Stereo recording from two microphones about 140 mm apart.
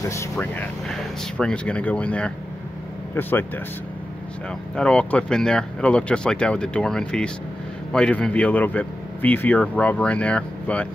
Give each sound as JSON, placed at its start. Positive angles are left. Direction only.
{"t": 0.0, "sound": "speech", "side_deg": 20}
{"t": 4.7, "sound": "speech", "side_deg": 5}